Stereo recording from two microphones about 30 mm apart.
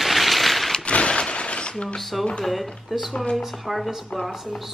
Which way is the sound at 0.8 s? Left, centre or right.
Left.